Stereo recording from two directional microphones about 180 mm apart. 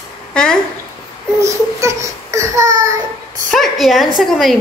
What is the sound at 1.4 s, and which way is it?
Speech, 15° right (ahead or behind).